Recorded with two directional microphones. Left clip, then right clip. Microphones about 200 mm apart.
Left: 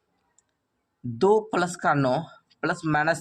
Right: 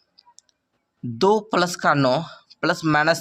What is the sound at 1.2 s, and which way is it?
Speech, 15° right (ahead or behind).